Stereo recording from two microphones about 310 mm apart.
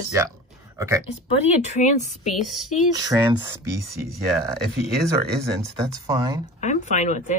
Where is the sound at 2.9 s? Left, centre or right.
Centre.